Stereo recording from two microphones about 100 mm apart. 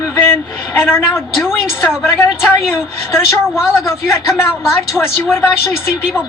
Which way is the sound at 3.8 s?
25° left (ahead or behind).